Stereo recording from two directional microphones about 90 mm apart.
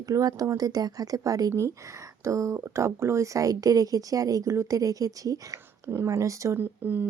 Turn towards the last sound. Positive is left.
turn(degrees=-20)  # may be behind; listen again after turning